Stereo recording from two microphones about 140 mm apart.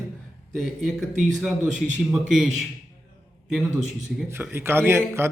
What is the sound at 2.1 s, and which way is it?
Speech, 5° right (ahead or behind).